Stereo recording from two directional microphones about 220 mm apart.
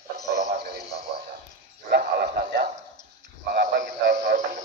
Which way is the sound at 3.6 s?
35° right (ahead or behind).